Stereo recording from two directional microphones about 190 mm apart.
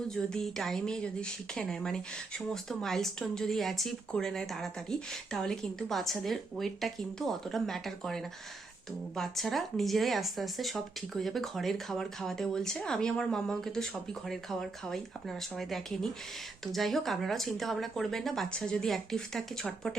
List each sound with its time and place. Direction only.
0.1 s speech: 5° left (ahead or behind)